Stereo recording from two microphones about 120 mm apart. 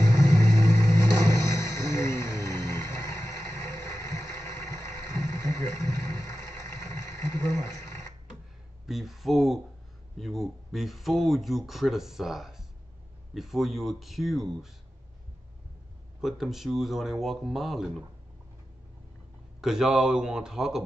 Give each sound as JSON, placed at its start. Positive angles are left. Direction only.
{"t": 0.1, "sound": "vehicle", "side_deg": 25}
{"t": 8.8, "sound": "a sound", "side_deg": 0}
{"t": 13.3, "sound": "speech", "side_deg": 0}
{"t": 16.2, "sound": "speech", "side_deg": 0}
{"t": 19.6, "sound": "speech", "side_deg": -5}